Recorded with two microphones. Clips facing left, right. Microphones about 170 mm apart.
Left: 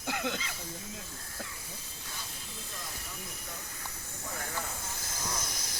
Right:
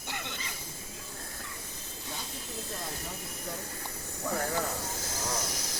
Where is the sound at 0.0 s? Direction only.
90° left.